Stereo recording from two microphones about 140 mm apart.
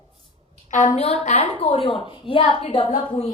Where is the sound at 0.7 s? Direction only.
55° left (ahead or behind).